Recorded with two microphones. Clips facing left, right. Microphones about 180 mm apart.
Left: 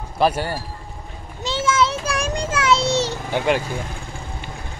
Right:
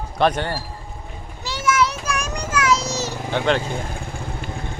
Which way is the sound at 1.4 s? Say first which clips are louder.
Left 1 dB; 25° left (ahead or behind).